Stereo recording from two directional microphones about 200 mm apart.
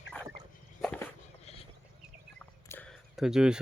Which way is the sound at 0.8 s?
5° left (ahead or behind).